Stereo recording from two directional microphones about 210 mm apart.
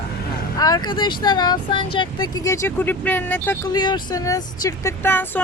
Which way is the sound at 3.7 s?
20° left (ahead or behind).